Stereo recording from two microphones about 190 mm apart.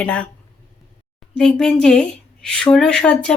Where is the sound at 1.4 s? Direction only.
5° left (ahead or behind).